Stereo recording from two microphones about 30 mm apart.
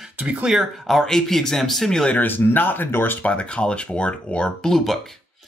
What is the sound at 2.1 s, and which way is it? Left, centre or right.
Speech, left.